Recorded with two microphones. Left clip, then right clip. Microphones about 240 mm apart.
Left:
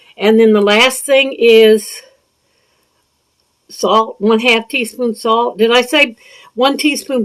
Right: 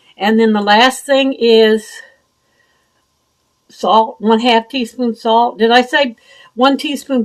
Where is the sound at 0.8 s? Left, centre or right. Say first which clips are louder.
Left 1 dB; left.